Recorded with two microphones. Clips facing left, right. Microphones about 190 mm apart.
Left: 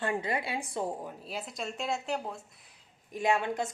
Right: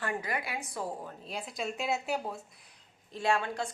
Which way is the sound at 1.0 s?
5° left (ahead or behind).